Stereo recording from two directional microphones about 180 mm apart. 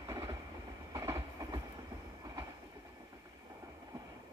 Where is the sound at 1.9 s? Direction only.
30° right (ahead or behind).